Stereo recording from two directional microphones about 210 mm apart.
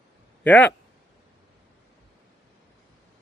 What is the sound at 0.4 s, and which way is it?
Speech, 5° left (ahead or behind).